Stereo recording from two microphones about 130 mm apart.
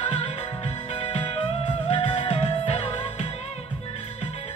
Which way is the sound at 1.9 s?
45° left (ahead or behind).